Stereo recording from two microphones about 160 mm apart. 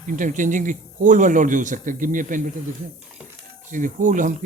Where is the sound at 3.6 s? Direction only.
55° right (ahead or behind).